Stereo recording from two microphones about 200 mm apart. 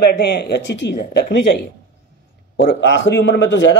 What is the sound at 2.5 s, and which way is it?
Speech, 60° left (ahead or behind).